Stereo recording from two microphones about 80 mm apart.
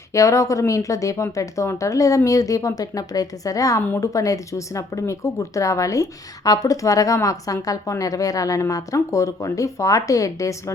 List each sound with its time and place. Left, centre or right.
0.1 s speech: left